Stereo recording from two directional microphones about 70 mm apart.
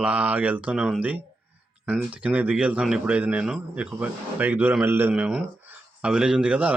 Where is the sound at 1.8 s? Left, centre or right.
Right.